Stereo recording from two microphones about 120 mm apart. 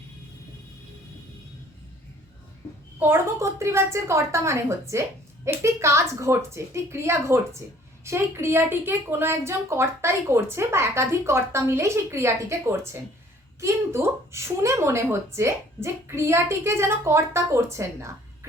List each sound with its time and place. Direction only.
3.0 s a woman's voice: 20° right (ahead or behind)